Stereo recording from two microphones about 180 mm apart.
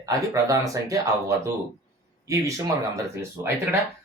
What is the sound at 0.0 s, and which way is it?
Speech, 20° right (ahead or behind).